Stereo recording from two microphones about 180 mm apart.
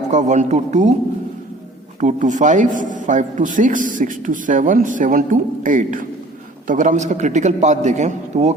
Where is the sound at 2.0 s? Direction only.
45° right (ahead or behind).